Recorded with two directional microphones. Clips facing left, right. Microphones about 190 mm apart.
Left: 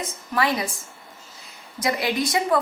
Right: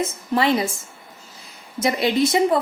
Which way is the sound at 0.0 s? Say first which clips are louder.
Right 4 dB; 25° right (ahead or behind).